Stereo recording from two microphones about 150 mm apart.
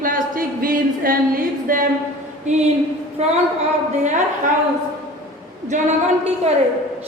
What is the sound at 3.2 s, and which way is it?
Speech, 45° right (ahead or behind).